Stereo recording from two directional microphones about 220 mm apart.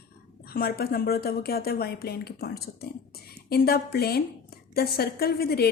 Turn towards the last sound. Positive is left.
turn(degrees=45)  # may be behind; listen again after turning